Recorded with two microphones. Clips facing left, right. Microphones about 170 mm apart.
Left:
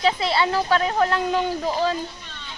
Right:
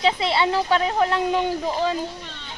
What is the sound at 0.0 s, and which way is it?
A woman's voice, 25° right (ahead or behind).